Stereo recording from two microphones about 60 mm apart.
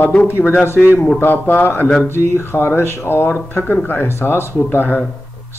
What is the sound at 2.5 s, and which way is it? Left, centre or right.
Speech, left.